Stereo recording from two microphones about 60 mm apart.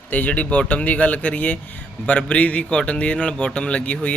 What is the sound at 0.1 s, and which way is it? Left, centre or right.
A man's voice, left.